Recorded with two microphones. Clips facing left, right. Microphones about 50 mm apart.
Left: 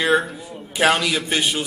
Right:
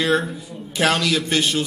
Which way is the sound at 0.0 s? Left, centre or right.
Centre.